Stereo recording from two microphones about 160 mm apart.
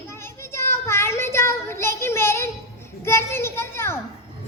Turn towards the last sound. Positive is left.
turn(degrees=15)  # may be behind; listen again after turning